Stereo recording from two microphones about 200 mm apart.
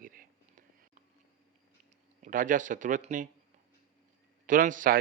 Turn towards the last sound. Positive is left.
turn(degrees=-40)  # may be behind; listen again after turning